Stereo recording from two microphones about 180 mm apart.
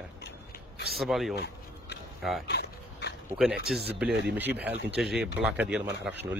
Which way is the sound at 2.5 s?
65° left (ahead or behind).